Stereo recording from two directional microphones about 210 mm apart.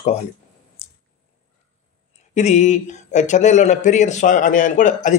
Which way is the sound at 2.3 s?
35° left (ahead or behind).